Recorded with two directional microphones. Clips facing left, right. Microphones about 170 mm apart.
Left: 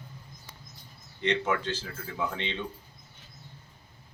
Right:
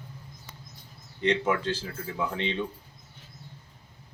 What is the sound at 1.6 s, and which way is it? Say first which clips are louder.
Speech: right 3 dB; 35° right (ahead or behind).